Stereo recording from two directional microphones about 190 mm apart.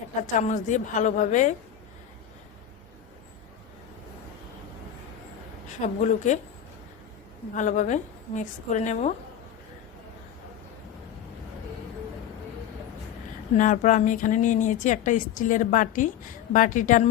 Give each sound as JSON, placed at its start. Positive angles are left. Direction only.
{"t": 0.2, "sound": "a woman's voice", "side_deg": 40}
{"t": 5.8, "sound": "a woman's voice", "side_deg": 40}
{"t": 7.5, "sound": "a woman's voice", "side_deg": 40}
{"t": 13.6, "sound": "speech", "side_deg": 40}